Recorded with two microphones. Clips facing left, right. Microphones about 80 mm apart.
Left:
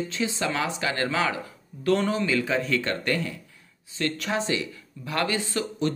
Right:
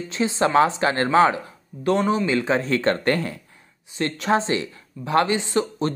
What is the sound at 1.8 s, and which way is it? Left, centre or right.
Speech, right.